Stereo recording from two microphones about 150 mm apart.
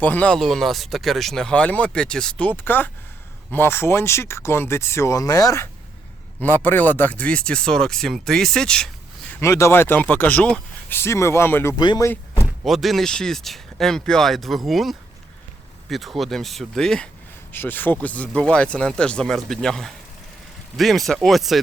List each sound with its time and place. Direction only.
0.0 s speech: 10° left (ahead or behind)
6.4 s speech: 15° left (ahead or behind)
9.3 s speech: 20° left (ahead or behind)
11.8 s speech: 30° left (ahead or behind)
12.6 s speech: centre (ahead or behind)